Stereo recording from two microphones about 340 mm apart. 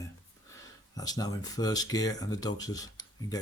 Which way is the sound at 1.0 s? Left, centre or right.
Centre.